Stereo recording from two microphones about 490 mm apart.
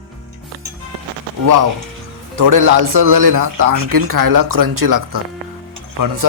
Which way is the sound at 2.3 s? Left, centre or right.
Right.